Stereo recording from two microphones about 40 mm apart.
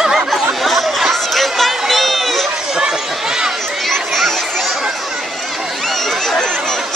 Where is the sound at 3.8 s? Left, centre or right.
Centre.